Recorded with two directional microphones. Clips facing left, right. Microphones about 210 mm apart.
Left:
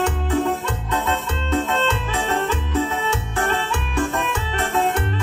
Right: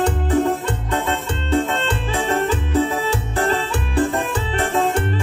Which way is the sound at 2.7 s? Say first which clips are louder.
Right 3 dB; 35° right (ahead or behind).